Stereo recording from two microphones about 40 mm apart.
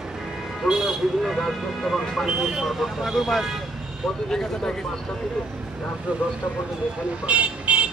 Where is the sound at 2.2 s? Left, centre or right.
Centre.